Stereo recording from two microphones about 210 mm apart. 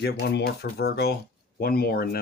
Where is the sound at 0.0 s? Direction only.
50° left (ahead or behind).